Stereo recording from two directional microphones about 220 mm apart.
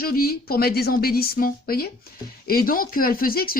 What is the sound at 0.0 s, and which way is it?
Speech, 40° left (ahead or behind).